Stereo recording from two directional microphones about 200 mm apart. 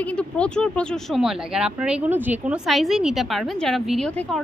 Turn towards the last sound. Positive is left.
turn(degrees=0)  # may be behind; listen again after turning